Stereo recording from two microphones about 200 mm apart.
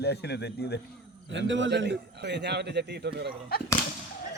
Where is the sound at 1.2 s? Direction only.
65° right (ahead or behind).